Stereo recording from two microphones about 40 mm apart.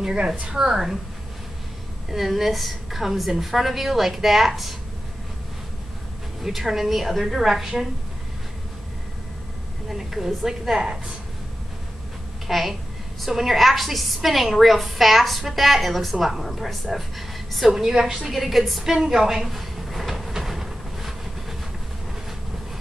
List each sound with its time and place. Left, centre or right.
0.0 s a woman's voice: centre
2.1 s a woman's voice: centre
6.4 s a woman's voice: centre
9.8 s a woman's voice: centre
12.4 s a child's voice: centre
18.3 s a woman's voice: centre
20.3 s train: centre